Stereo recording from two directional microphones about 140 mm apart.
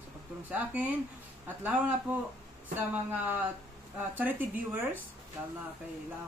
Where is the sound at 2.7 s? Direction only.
10° right (ahead or behind).